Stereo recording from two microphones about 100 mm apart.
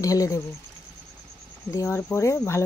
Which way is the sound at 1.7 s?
30° left (ahead or behind).